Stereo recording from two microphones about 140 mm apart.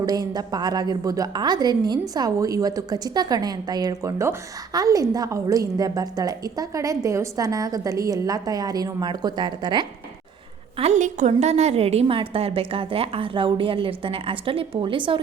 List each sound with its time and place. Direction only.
0.0 s a woman's voice: 25° right (ahead or behind)
10.8 s a woman's voice: 55° right (ahead or behind); by 15.2 s 35° right (ahead or behind)